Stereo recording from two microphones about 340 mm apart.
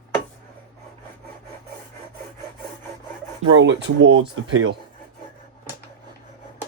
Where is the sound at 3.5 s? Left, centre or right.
Right.